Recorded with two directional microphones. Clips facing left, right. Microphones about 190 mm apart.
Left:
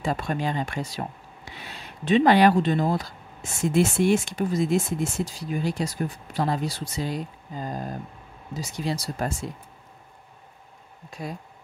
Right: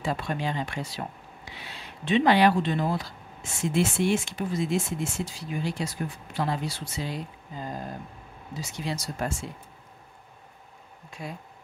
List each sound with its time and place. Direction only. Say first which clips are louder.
0.0 s speech: left 3 dB; 45° left (ahead or behind)
11.1 s speech: left 3 dB; 40° left (ahead or behind)